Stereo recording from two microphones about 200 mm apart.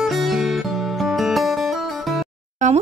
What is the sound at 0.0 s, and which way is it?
Music, centre (ahead or behind).